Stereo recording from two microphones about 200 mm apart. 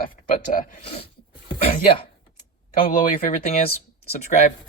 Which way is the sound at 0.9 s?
30° left (ahead or behind).